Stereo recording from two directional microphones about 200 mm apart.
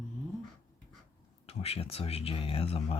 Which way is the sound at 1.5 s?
30° left (ahead or behind).